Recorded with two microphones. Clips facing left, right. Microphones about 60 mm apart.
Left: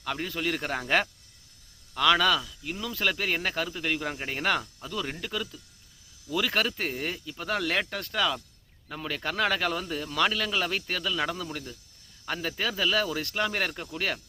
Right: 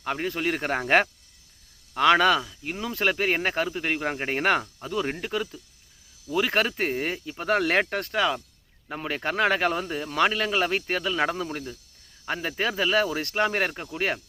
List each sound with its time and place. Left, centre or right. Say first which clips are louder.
0.0 s speech: right 4 dB; right